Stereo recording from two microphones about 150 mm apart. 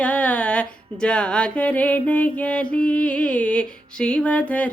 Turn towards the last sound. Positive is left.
turn(degrees=10)  # may be behind; listen again after turning